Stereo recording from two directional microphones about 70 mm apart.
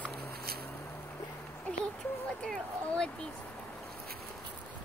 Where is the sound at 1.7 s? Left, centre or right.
Centre.